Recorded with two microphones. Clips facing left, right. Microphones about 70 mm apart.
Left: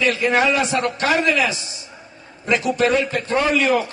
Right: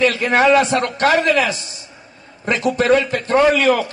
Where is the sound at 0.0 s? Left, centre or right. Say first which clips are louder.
Right 3 dB; right.